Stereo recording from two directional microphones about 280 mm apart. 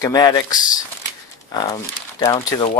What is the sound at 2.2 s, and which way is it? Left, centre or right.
Speech, centre.